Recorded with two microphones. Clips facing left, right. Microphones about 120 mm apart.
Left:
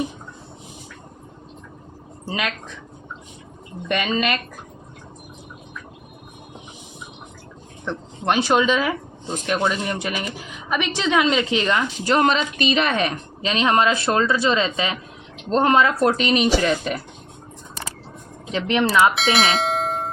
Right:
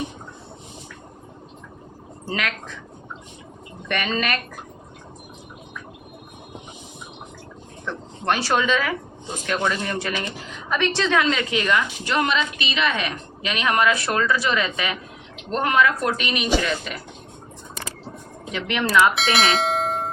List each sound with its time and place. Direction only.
2.2 s speech: 20° left (ahead or behind)
3.8 s a woman's voice: 20° left (ahead or behind)
7.9 s a woman's voice: 20° left (ahead or behind)
18.5 s a woman's voice: 25° left (ahead or behind)
19.1 s bell: centre (ahead or behind)